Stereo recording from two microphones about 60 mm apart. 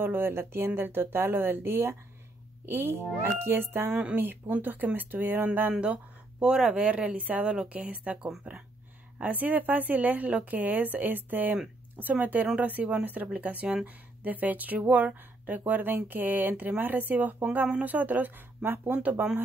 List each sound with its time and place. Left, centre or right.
0.0 s speech: right
3.9 s speech: centre
4.2 s speech: right
6.4 s speech: centre; by 18.9 s right